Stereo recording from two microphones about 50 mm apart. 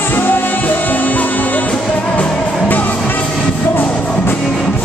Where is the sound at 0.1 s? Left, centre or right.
Left.